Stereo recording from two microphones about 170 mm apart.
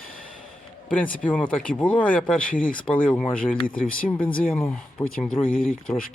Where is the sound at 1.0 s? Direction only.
10° left (ahead or behind).